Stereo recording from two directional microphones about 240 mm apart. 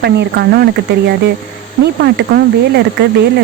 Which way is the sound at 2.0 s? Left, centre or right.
Right.